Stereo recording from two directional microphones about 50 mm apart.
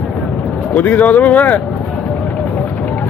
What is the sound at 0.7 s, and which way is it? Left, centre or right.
Speech, left.